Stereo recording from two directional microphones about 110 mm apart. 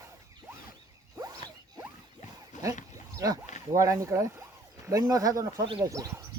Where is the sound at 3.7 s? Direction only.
30° right (ahead or behind).